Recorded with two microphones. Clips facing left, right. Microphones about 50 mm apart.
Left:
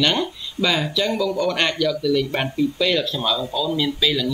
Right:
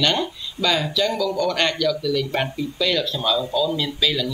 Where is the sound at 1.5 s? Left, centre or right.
Centre.